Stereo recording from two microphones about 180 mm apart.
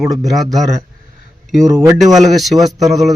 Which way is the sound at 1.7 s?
20° right (ahead or behind).